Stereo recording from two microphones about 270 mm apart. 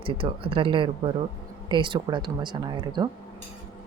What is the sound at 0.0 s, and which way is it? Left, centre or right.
Speech, centre.